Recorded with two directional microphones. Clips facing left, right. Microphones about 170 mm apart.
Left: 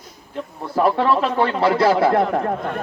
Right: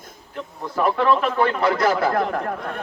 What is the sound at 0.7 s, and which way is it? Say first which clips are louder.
Speech: left 2 dB; 30° left (ahead or behind).